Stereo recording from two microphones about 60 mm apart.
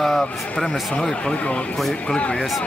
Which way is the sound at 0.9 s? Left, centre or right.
Centre.